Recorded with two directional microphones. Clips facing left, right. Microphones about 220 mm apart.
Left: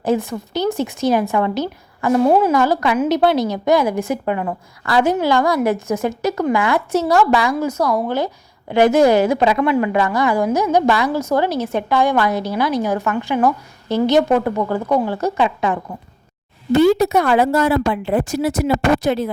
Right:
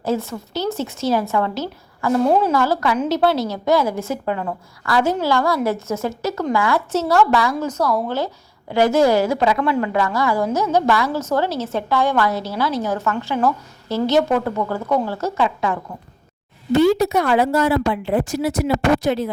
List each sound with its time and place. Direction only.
0.0 s a woman's voice: 15° left (ahead or behind)
16.7 s a woman's voice: 50° left (ahead or behind)